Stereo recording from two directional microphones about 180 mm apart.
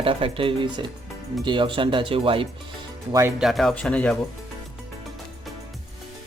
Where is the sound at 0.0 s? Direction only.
30° right (ahead or behind).